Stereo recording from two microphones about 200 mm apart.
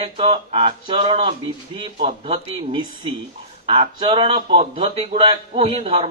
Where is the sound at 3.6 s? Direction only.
25° right (ahead or behind).